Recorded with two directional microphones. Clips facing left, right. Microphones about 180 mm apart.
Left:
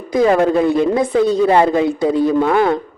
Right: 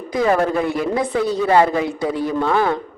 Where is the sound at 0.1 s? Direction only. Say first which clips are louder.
Left 5 dB; 20° left (ahead or behind).